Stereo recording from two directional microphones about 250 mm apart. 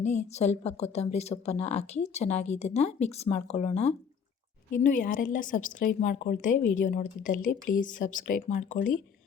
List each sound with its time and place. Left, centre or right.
0.3 s a woman's voice: left